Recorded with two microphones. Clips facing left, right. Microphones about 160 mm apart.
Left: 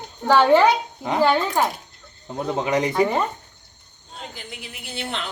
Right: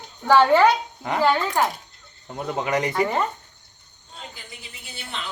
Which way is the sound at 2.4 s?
20° left (ahead or behind).